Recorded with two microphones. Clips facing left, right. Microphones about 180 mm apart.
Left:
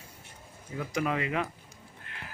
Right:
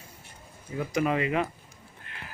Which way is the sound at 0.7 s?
20° right (ahead or behind).